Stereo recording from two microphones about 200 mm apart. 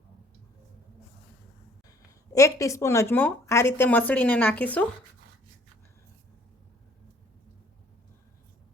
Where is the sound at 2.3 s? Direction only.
15° left (ahead or behind).